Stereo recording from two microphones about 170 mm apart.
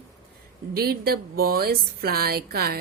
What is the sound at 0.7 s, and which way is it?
A woman's voice, 65° right (ahead or behind).